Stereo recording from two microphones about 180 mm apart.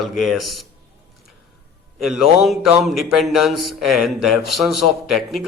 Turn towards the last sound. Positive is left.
turn(degrees=0)  # may be behind; listen again after turning